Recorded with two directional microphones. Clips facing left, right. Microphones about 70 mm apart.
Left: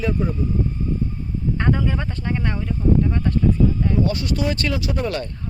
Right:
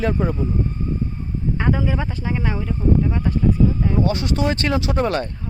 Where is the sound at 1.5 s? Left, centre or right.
Centre.